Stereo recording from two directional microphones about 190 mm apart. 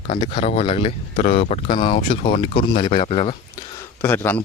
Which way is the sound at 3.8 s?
10° left (ahead or behind).